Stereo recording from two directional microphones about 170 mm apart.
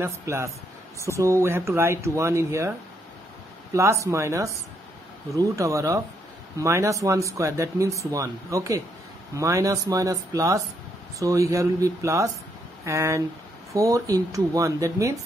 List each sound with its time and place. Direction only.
0.0 s speech: 15° right (ahead or behind)
3.7 s speech: 15° right (ahead or behind)